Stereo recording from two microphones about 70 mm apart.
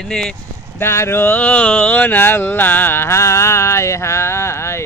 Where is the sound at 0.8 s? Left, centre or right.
Left.